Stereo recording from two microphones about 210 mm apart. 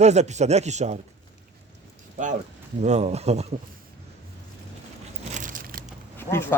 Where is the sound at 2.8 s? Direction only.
30° right (ahead or behind).